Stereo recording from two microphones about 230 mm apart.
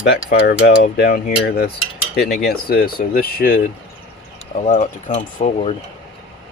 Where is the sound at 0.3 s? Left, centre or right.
Left.